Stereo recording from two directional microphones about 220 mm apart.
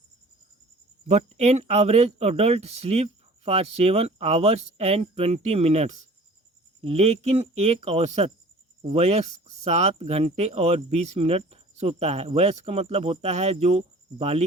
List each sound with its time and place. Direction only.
1.0 s speech: 30° right (ahead or behind)